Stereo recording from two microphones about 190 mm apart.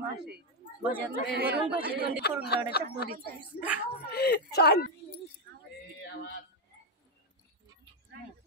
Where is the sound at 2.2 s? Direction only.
60° left (ahead or behind).